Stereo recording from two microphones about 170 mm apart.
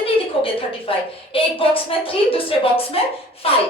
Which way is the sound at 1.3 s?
30° left (ahead or behind).